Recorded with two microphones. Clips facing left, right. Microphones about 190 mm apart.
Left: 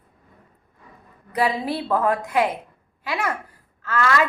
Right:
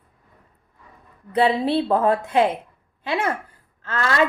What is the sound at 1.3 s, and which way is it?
A woman's voice, 30° right (ahead or behind).